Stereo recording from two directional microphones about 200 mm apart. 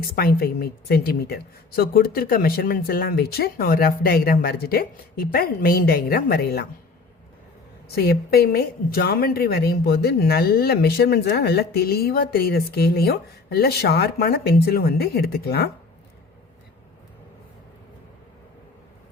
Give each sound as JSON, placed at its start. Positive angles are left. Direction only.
{"t": 0.2, "sound": "a woman's voice", "side_deg": 50}
{"t": 7.9, "sound": "a woman's voice", "side_deg": 50}